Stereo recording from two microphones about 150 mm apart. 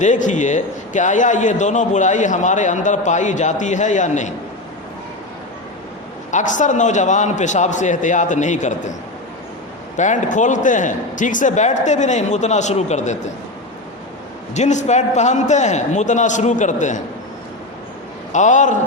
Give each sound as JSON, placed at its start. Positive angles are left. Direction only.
{"t": 0.0, "sound": "a man's voice", "side_deg": 55}
{"t": 6.3, "sound": "a man's voice", "side_deg": 55}
{"t": 10.0, "sound": "a man's voice", "side_deg": 55}
{"t": 14.5, "sound": "a man's voice", "side_deg": 50}
{"t": 18.3, "sound": "a man's voice", "side_deg": 55}